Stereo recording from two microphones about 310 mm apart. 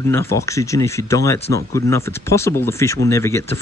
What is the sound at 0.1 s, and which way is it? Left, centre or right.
Speech, centre.